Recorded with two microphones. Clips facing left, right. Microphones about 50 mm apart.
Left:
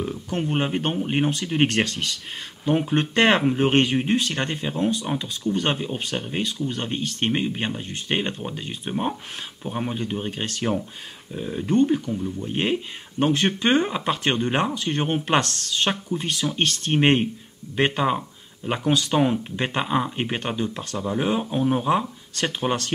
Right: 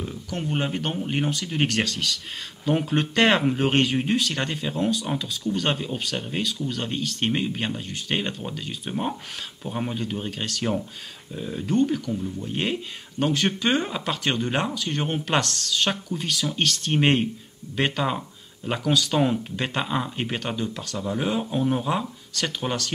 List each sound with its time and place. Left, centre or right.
0.3 s speech: left
12.1 s speech: centre
12.4 s speech: centre
16.9 s speech: centre
21.0 s speech: centre